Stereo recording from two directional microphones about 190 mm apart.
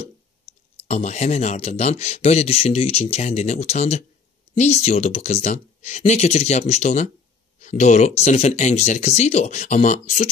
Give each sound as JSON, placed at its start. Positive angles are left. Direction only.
{"t": 0.5, "sound": "speech", "side_deg": 35}